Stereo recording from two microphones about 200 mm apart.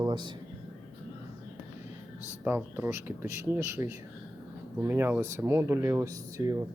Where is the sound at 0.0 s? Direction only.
20° right (ahead or behind).